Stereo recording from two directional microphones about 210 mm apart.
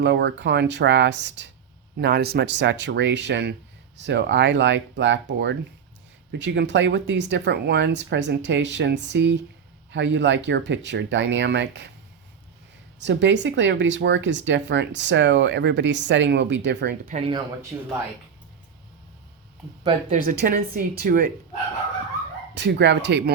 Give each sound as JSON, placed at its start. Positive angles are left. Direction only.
{"t": 0.0, "sound": "speech", "side_deg": -55}
{"t": 13.1, "sound": "speech", "side_deg": -60}
{"t": 17.1, "sound": "speech", "side_deg": -30}
{"t": 17.7, "sound": "speech", "side_deg": -15}
{"t": 20.1, "sound": "speech", "side_deg": -45}
{"t": 22.5, "sound": "speech", "side_deg": -55}